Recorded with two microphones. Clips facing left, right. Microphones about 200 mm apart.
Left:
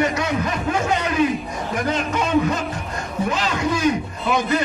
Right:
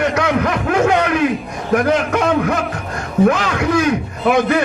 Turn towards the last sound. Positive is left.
turn(degrees=-65)  # may be behind; listen again after turning